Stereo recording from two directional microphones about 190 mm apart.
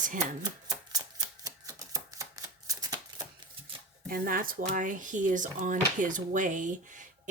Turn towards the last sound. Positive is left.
turn(degrees=-40)  # may be behind; listen again after turning